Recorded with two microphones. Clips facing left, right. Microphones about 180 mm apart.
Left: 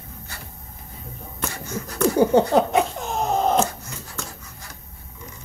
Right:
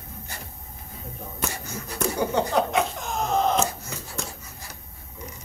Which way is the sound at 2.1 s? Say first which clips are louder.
Left 7 dB; 30° left (ahead or behind).